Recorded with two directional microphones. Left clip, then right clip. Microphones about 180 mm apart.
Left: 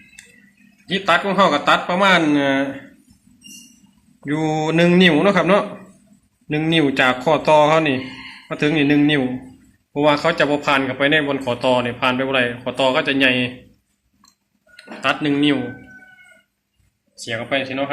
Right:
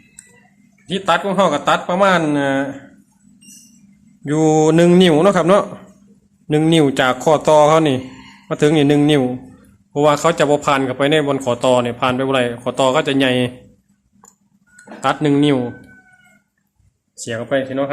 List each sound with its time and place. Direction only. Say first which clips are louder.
0.9 s speech: even; 35° right (ahead or behind)
4.3 s speech: right 7 dB; 50° right (ahead or behind)
15.0 s speech: right 3 dB; 60° right (ahead or behind)
17.3 s speech: right 3 dB; 60° right (ahead or behind)